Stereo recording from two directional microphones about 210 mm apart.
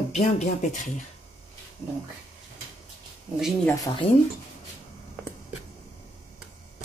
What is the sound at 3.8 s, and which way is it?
Speech, 25° left (ahead or behind).